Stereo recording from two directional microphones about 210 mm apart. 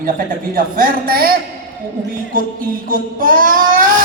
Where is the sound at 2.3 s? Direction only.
40° right (ahead or behind).